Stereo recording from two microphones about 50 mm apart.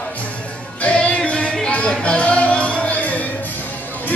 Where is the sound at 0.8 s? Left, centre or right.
Left.